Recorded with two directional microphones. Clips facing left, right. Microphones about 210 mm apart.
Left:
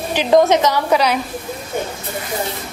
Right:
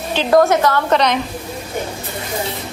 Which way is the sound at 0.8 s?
10° left (ahead or behind).